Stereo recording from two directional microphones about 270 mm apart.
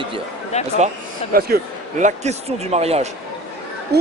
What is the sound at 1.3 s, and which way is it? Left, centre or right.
A man's voice, right.